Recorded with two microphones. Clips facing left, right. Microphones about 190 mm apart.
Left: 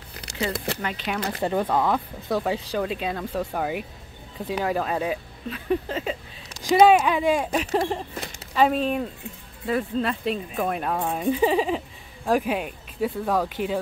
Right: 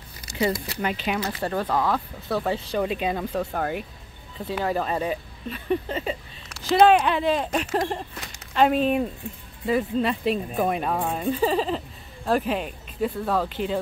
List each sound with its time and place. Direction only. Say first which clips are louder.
0.1 s a sound: left 2 dB; 70° left (ahead or behind)
0.8 s speech: right 7 dB; 10° right (ahead or behind)
1.4 s speech: left 4 dB; 15° left (ahead or behind)
2.4 s speech: even; 5° left (ahead or behind)
2.8 s speech: right 2 dB; 5° right (ahead or behind)
3.3 s speech: even; 5° left (ahead or behind)
11.2 s speech: left 2 dB; 10° left (ahead or behind)